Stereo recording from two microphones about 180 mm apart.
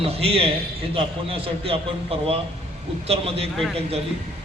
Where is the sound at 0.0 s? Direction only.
35° right (ahead or behind).